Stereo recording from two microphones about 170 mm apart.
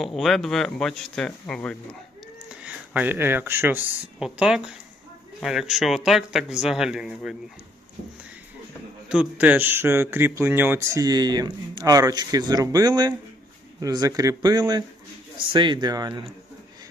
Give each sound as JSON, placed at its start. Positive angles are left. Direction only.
{"t": 0.0, "sound": "speech", "side_deg": 0}
{"t": 2.6, "sound": "speech", "side_deg": -10}
{"t": 9.0, "sound": "speech", "side_deg": -5}